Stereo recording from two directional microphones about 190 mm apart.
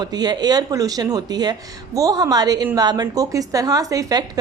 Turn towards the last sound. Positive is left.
turn(degrees=-20)  # may be behind; listen again after turning